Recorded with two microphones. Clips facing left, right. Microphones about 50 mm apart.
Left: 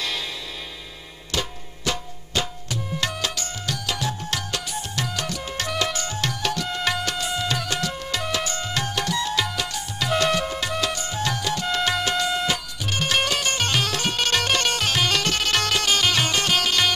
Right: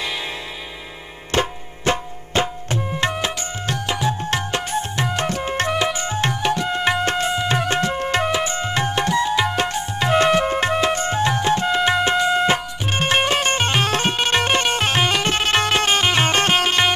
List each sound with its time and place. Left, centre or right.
1.3 s tabla: right
5.9 s music: right
8.3 s music: right